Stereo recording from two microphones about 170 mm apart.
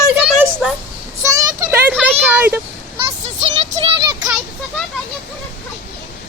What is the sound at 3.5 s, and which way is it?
Music, 30° right (ahead or behind).